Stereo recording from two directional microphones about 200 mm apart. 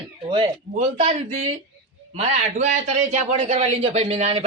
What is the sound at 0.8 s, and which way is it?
A man's voice, 35° right (ahead or behind).